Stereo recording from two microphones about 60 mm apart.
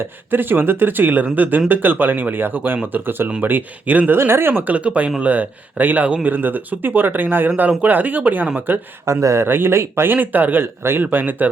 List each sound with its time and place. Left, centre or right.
0.0 s speech: right
4.2 s speech: right
9.0 s speech: right
10.2 s speech: right